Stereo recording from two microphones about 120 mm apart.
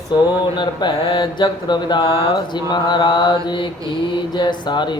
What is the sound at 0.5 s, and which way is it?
Speech, 40° left (ahead or behind).